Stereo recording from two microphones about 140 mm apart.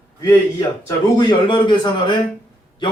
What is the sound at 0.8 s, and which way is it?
Speech, 30° left (ahead or behind).